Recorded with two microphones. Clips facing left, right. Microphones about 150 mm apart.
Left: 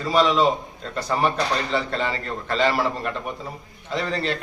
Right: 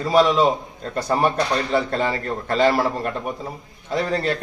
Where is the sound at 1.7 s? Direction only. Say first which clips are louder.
Right 4 dB; 45° right (ahead or behind).